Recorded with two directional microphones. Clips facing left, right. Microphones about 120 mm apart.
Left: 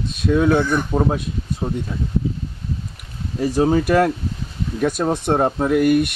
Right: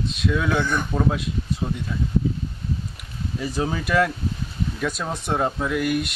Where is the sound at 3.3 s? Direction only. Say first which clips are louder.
Left 9 dB; 45° left (ahead or behind).